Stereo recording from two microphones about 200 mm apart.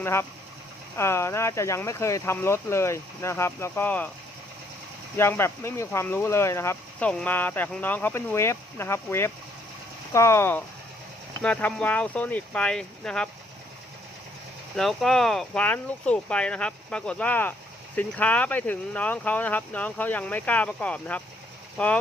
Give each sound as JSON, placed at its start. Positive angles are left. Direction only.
{"t": 0.0, "sound": "speech", "side_deg": 10}
{"t": 5.1, "sound": "speech", "side_deg": 10}
{"t": 14.8, "sound": "speech", "side_deg": 0}